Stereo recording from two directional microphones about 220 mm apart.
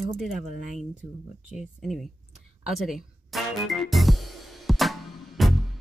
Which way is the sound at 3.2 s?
Centre (ahead or behind).